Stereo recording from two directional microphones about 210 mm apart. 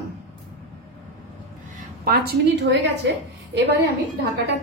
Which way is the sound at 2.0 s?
50° right (ahead or behind).